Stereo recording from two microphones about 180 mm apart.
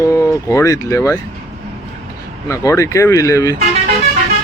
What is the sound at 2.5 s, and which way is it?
Speech, 20° left (ahead or behind).